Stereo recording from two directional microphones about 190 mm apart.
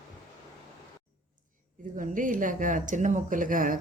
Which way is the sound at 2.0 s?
45° right (ahead or behind).